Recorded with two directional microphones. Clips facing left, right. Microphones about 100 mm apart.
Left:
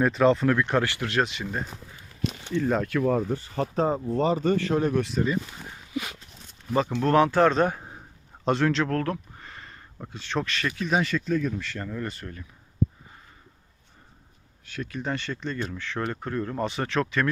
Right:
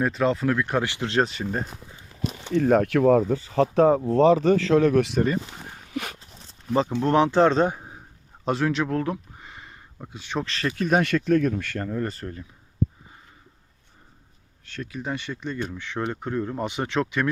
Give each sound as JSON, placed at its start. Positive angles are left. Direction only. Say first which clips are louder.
{"t": 0.0, "sound": "speech", "louder": "left 2 dB", "side_deg": 0}
{"t": 2.5, "sound": "speech", "louder": "right 6 dB", "side_deg": -75}
{"t": 5.9, "sound": "a sound", "louder": "right 1 dB", "side_deg": -55}
{"t": 6.9, "sound": "speech", "louder": "even", "side_deg": -20}
{"t": 10.4, "sound": "speech", "louder": "right 2 dB", "side_deg": -30}
{"t": 10.8, "sound": "speech", "louder": "right 5 dB", "side_deg": -50}
{"t": 14.8, "sound": "speech", "louder": "even", "side_deg": -5}